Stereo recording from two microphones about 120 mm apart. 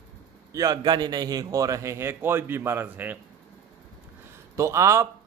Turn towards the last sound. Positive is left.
turn(degrees=-25)  # may be behind; listen again after turning